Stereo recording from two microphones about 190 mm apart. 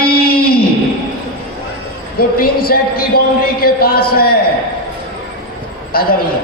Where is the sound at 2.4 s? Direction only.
50° left (ahead or behind).